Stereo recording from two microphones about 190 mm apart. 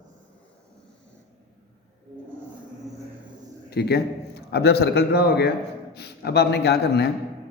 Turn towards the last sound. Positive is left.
turn(degrees=60)  # may be behind; listen again after turning